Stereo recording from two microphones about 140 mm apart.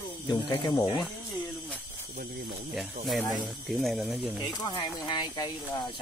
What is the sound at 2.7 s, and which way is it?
Speech, centre (ahead or behind).